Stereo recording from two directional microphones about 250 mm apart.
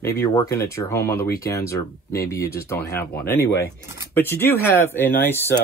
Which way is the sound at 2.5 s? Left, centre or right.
Centre.